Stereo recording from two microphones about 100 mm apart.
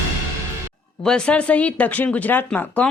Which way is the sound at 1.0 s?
10° left (ahead or behind).